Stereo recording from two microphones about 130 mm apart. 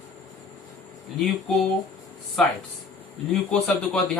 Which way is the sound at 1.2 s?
Centre (ahead or behind).